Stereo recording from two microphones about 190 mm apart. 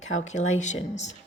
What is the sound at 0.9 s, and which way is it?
Speech, 35° left (ahead or behind).